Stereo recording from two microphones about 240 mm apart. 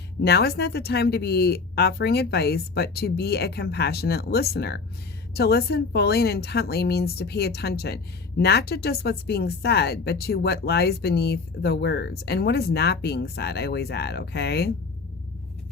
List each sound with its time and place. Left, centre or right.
0.2 s speech: left